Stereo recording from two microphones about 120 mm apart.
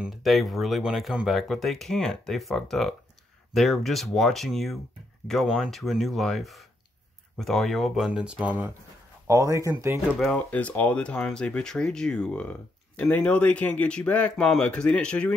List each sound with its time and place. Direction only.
0.0 s speech: centre (ahead or behind)
9.3 s speech: 25° right (ahead or behind)
10.1 s speech: centre (ahead or behind)
10.5 s speech: 15° left (ahead or behind)